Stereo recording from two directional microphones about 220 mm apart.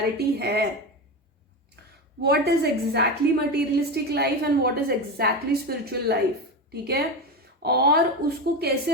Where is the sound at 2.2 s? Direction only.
45° right (ahead or behind).